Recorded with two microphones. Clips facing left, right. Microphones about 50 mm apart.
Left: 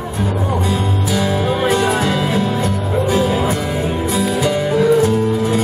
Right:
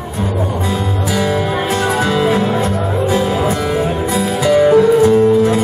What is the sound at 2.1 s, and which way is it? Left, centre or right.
Music, right.